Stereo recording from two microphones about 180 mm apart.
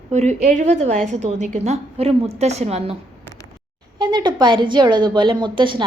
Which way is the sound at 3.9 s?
25° right (ahead or behind).